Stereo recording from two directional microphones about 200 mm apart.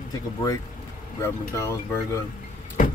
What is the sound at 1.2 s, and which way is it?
Speech, 15° left (ahead or behind).